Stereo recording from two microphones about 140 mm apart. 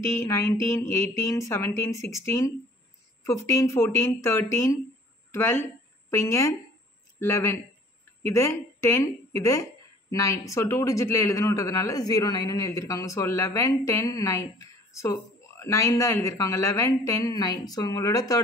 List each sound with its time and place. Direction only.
0.1 s speech: 20° left (ahead or behind)